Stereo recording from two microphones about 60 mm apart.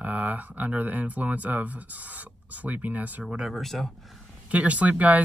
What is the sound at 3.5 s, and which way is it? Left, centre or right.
Speech, centre.